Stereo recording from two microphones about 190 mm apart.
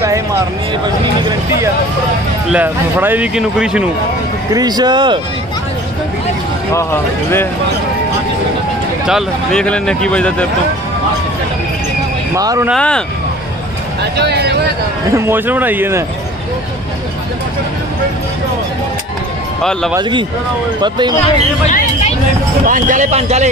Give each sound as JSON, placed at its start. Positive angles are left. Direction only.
{"t": 2.5, "sound": "speech", "side_deg": -10}
{"t": 4.6, "sound": "speech", "side_deg": -20}
{"t": 6.7, "sound": "speech", "side_deg": 15}
{"t": 9.0, "sound": "speech", "side_deg": 0}
{"t": 12.4, "sound": "speech", "side_deg": -20}
{"t": 12.7, "sound": "speech", "side_deg": 5}
{"t": 14.1, "sound": "speech", "side_deg": -60}
{"t": 15.1, "sound": "speech", "side_deg": -10}
{"t": 19.6, "sound": "speech", "side_deg": 0}
{"t": 19.9, "sound": "speech", "side_deg": -25}
{"t": 21.6, "sound": "hubbub", "side_deg": 40}
{"t": 22.7, "sound": "speech", "side_deg": -45}